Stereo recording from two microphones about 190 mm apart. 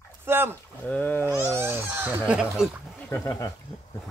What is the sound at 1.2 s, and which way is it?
Speech, 15° right (ahead or behind).